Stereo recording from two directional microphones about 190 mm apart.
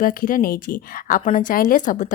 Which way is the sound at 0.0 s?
45° left (ahead or behind).